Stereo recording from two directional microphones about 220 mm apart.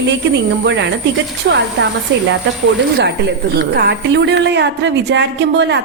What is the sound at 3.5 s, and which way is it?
A woman's voice, 45° right (ahead or behind).